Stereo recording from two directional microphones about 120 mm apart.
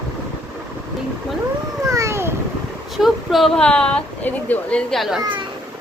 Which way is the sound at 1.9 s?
25° right (ahead or behind).